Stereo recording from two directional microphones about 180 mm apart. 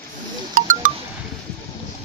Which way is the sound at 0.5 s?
50° right (ahead or behind).